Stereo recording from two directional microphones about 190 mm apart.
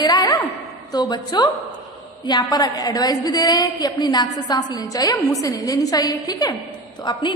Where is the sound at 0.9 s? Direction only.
20° left (ahead or behind).